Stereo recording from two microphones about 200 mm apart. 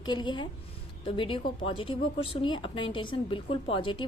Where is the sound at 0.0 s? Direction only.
20° left (ahead or behind).